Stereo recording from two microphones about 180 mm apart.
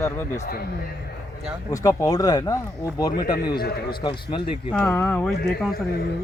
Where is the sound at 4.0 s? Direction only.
25° left (ahead or behind).